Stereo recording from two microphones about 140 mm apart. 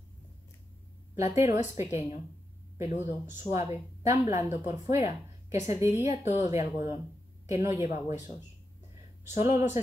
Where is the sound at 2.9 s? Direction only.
60° left (ahead or behind).